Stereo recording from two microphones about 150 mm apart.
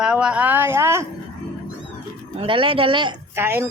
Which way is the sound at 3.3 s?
15° right (ahead or behind).